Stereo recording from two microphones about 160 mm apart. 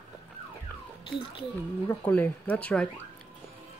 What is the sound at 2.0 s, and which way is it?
Speech, 10° left (ahead or behind).